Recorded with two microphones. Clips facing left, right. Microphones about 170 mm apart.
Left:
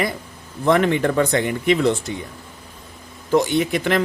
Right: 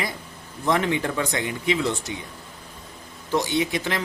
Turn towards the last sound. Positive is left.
turn(degrees=55)  # may be behind; listen again after turning